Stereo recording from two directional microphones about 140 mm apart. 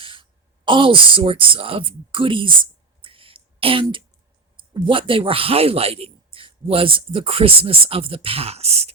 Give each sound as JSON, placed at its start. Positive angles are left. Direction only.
{"t": 0.0, "sound": "speech", "side_deg": -35}
{"t": 3.0, "sound": "a sound", "side_deg": -40}
{"t": 4.5, "sound": "speech", "side_deg": -35}